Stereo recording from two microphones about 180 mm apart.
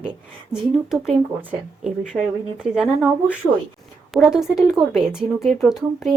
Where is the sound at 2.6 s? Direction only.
5° right (ahead or behind).